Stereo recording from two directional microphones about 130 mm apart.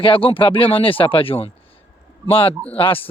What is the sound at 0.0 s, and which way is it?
Speech, 45° left (ahead or behind).